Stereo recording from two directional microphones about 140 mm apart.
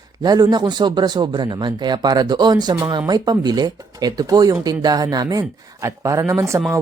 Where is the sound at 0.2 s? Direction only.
30° right (ahead or behind).